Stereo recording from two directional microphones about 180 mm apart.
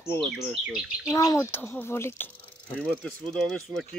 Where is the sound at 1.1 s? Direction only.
15° left (ahead or behind); by 3.9 s centre (ahead or behind).